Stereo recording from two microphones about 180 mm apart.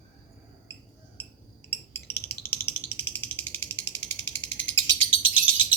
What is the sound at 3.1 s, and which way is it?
Frog, 85° left.